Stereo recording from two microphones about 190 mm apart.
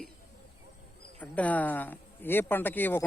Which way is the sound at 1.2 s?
10° left (ahead or behind).